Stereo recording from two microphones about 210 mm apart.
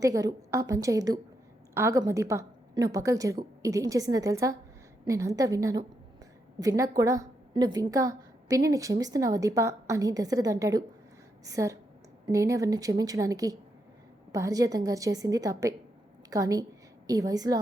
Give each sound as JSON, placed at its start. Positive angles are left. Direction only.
{"t": 0.0, "sound": "a woman's voice", "side_deg": -15}